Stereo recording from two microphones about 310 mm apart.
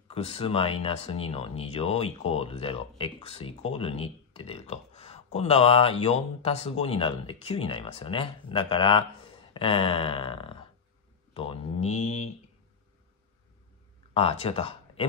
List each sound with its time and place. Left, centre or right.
0.1 s speech: centre
14.1 s speech: centre